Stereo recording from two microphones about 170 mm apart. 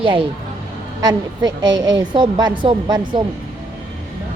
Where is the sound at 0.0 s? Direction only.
30° right (ahead or behind).